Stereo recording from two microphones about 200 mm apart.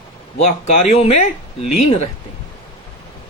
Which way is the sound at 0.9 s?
30° left (ahead or behind).